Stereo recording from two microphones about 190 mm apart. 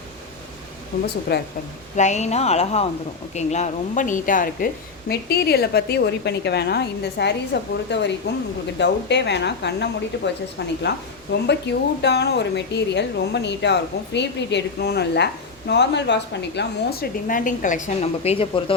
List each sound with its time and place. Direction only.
0.9 s a woman's voice: 45° left (ahead or behind)
1.3 s a woman's voice: 60° left (ahead or behind)
2.0 s a woman's voice: 35° left (ahead or behind)